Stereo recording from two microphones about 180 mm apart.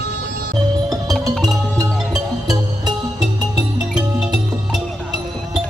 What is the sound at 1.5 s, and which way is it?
Music, 20° right (ahead or behind).